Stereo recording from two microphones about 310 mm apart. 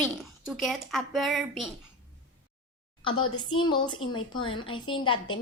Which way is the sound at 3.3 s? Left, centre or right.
Centre.